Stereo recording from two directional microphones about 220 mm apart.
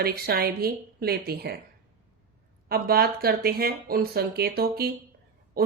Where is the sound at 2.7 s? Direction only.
45° right (ahead or behind).